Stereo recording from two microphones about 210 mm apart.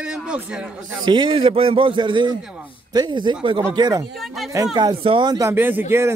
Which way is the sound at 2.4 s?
5° right (ahead or behind).